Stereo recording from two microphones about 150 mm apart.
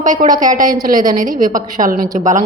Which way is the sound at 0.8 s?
65° right (ahead or behind).